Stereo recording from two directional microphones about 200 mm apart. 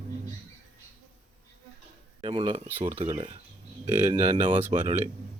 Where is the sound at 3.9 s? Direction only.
35° right (ahead or behind).